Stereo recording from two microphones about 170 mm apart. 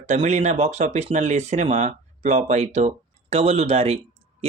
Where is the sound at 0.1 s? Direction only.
40° right (ahead or behind).